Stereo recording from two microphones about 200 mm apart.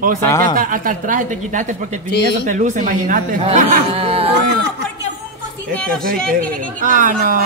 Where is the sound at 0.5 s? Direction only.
40° right (ahead or behind).